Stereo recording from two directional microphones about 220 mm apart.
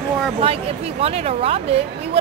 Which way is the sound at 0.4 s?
25° right (ahead or behind).